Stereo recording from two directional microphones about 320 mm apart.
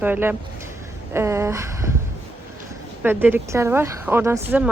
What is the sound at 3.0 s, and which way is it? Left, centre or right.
Speech, centre.